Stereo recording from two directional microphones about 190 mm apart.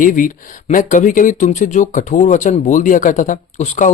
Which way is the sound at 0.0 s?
45° left (ahead or behind).